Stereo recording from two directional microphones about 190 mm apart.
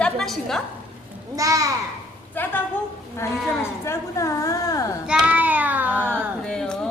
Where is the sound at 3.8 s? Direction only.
15° left (ahead or behind).